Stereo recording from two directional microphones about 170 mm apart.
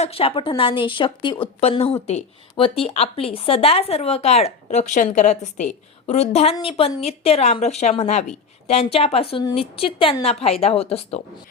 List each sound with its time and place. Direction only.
0.0 s a woman's voice: 35° left (ahead or behind)